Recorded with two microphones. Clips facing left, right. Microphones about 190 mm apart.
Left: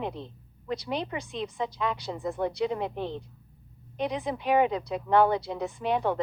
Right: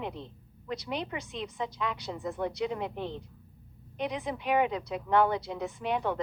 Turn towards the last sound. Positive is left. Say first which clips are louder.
# left 3 dB
turn(degrees=35)  # may be behind; listen again after turning